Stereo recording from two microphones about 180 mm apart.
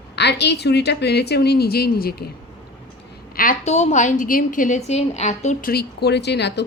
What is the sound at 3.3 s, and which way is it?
A woman's voice, 50° left (ahead or behind).